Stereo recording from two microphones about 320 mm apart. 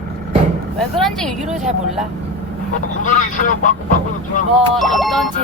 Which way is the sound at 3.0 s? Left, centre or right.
Left.